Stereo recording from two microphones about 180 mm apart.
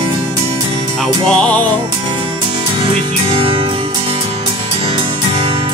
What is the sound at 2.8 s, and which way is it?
Music, 30° right (ahead or behind).